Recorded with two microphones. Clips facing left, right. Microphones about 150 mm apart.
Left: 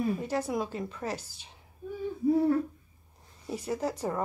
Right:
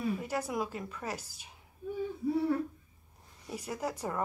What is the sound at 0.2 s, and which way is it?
A woman's voice, 30° left (ahead or behind).